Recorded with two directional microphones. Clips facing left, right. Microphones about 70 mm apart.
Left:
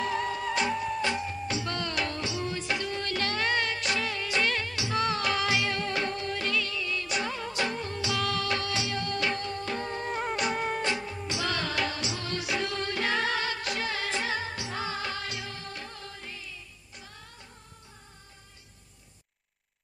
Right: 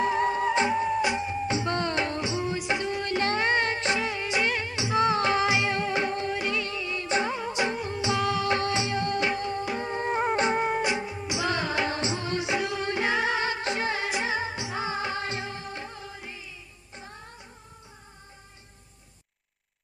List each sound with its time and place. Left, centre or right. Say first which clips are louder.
0.0 s music: right 6 dB; right